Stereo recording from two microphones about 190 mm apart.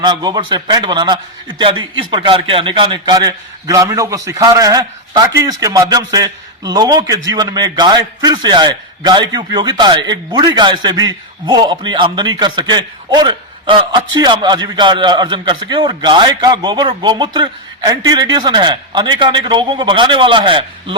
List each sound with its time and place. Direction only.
0.0 s a man's voice: 20° right (ahead or behind)